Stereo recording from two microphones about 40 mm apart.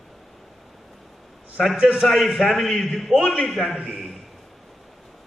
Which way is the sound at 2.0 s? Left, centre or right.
Centre.